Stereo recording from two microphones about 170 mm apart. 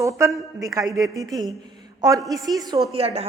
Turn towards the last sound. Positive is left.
turn(degrees=-35)  # may be behind; listen again after turning